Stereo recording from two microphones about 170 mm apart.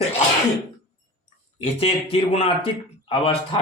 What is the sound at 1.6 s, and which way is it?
Speech, 35° left (ahead or behind).